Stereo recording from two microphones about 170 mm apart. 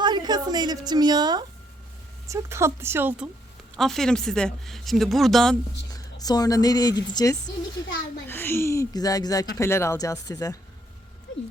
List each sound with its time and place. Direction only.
0.0 s a woman's voice: 25° right (ahead or behind)
3.8 s speech: centre (ahead or behind)
5.9 s speech: 20° left (ahead or behind)
8.3 s speech: 15° left (ahead or behind)